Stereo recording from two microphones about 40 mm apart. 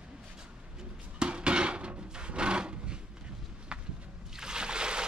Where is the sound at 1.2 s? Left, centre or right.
Right.